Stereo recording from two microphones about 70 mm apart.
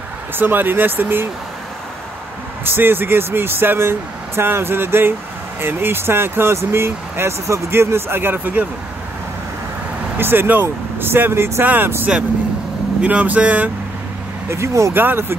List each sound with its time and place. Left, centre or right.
0.4 s speech: right
2.6 s speech: right
10.1 s speech: right
11.6 s speech: right
13.0 s speech: centre
14.5 s speech: right
15.0 s speech: right